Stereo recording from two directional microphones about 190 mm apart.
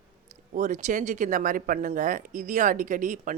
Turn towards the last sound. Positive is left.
turn(degrees=-45)  # may be behind; listen again after turning